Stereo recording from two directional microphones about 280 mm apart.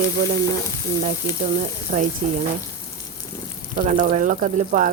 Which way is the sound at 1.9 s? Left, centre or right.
Right.